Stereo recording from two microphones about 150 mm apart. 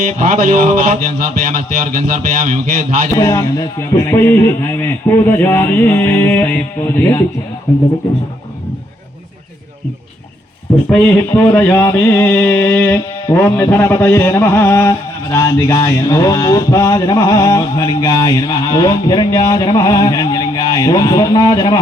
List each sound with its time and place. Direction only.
0.0 s music: 60° right (ahead or behind)
3.2 s a man's voice: 25° left (ahead or behind)
11.3 s mantra: 15° left (ahead or behind)